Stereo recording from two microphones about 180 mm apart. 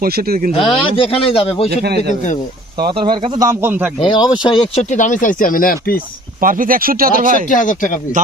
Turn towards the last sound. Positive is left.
turn(degrees=45)  # may be behind; listen again after turning